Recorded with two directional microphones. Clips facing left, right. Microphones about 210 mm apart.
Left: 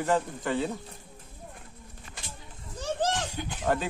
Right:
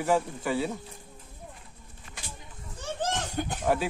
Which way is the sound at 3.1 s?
50° right (ahead or behind).